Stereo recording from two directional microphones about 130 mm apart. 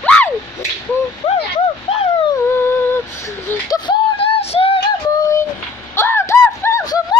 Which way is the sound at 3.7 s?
35° left (ahead or behind).